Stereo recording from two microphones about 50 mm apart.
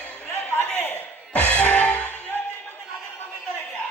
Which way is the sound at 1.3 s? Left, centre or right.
Left.